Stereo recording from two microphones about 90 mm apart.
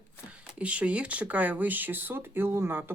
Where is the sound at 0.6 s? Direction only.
15° right (ahead or behind).